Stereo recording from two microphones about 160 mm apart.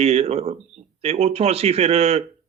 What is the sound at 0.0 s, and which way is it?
Speech, 40° right (ahead or behind).